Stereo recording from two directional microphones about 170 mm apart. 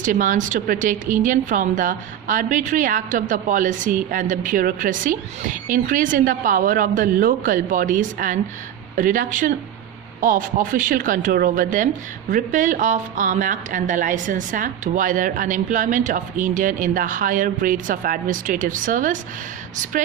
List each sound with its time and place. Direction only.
0.0 s a woman's voice: 50° right (ahead or behind)